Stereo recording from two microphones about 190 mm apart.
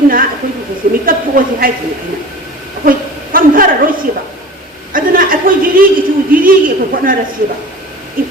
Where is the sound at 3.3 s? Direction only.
50° right (ahead or behind).